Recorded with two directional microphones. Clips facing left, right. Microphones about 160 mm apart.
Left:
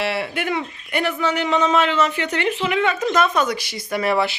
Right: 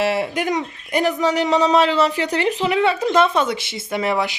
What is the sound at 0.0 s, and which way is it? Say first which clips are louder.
Speech: right 4 dB; 40° right (ahead or behind).